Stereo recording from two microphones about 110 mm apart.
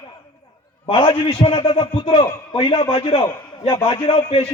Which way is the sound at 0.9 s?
50° left (ahead or behind).